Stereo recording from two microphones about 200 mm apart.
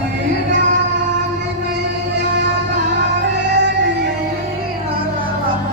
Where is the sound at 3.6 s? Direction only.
60° right (ahead or behind).